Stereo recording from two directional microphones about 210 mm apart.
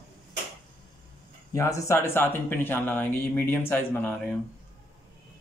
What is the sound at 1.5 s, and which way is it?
Speech, 15° left (ahead or behind).